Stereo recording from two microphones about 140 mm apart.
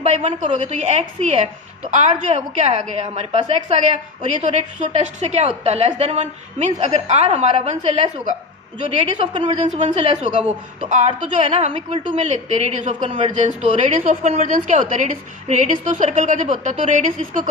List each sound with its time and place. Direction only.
0.0 s a woman's voice: 55° right (ahead or behind); by 12.3 s 40° right (ahead or behind)
12.3 s a woman's voice: 55° right (ahead or behind)
13.1 s a woman's voice: 40° right (ahead or behind)
13.6 s a woman's voice: 50° right (ahead or behind)